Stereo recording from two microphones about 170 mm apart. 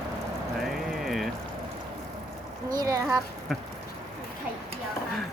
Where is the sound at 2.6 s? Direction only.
20° right (ahead or behind).